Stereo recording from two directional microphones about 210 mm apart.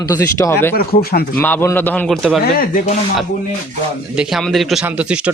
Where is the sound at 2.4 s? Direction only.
45° left (ahead or behind).